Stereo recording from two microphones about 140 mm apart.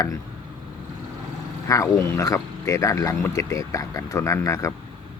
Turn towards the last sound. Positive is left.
turn(degrees=20)  # may be behind; listen again after turning